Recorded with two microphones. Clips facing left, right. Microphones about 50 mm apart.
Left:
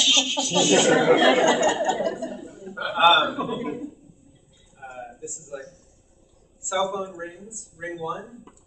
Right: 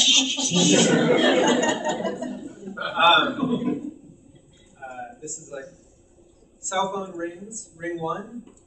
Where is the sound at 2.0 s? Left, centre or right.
Right.